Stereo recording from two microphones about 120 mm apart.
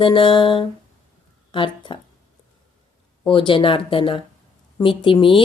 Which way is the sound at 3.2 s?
45° left (ahead or behind).